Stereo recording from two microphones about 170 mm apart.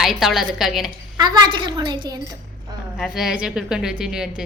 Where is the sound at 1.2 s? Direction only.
25° right (ahead or behind).